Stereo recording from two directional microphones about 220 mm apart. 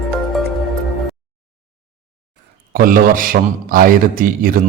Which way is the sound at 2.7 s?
40° right (ahead or behind).